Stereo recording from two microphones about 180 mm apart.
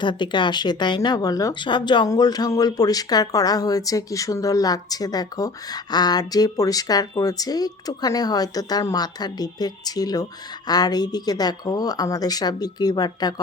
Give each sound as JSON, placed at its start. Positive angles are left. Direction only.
{"t": 0.0, "sound": "speech", "side_deg": 25}